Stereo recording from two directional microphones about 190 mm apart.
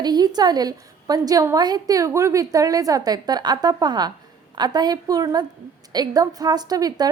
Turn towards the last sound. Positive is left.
turn(degrees=-20)  # may be behind; listen again after turning